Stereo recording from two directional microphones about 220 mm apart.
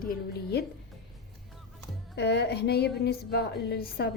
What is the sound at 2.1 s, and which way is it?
Speech, 50° left (ahead or behind).